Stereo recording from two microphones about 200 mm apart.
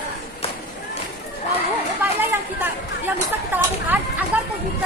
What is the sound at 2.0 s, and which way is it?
Chatter, 10° right (ahead or behind).